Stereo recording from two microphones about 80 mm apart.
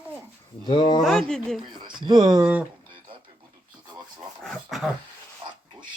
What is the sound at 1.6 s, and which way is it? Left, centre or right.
Speech, right.